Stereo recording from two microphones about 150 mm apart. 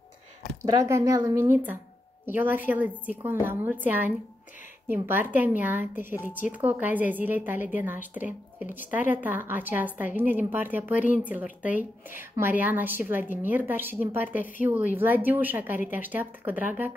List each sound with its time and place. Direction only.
0.6 s a woman's voice: 20° right (ahead or behind)